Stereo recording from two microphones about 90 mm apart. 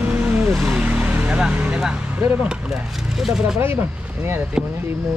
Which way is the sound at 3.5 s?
25° right (ahead or behind).